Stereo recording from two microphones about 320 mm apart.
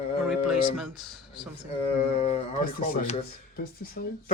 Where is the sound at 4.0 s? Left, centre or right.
Left.